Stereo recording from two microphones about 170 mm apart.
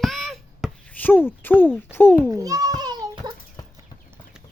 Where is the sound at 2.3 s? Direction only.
20° right (ahead or behind).